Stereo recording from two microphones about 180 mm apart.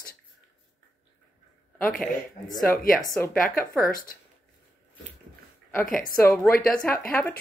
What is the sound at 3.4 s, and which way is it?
Speech, 50° left (ahead or behind).